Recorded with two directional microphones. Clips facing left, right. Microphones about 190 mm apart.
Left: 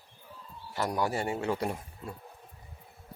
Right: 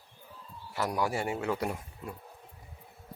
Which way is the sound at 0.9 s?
5° right (ahead or behind).